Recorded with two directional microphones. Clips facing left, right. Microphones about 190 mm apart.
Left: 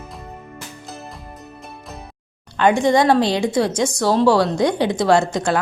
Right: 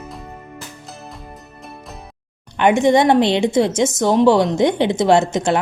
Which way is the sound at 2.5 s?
20° right (ahead or behind).